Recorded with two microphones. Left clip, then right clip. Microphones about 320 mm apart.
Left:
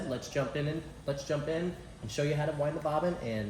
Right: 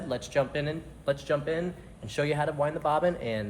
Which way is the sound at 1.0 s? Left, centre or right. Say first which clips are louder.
Right 7 dB; centre.